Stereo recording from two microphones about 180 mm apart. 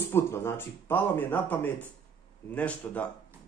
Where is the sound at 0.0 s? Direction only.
15° left (ahead or behind).